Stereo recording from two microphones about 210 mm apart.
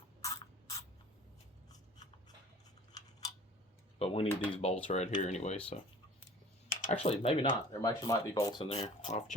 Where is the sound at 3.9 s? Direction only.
30° left (ahead or behind).